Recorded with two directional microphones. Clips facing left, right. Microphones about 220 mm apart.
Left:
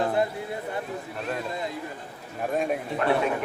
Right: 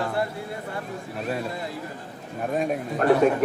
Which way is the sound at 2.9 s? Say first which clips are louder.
Right 7 dB; 45° right (ahead or behind).